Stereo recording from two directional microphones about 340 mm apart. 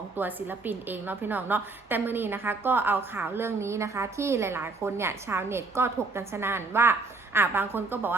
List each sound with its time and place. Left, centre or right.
0.2 s a woman's voice: centre